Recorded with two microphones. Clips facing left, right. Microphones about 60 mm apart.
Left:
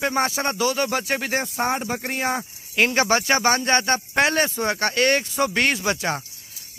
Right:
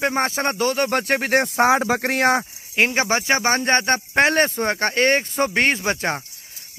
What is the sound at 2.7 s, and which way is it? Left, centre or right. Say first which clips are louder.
Speech: even; right.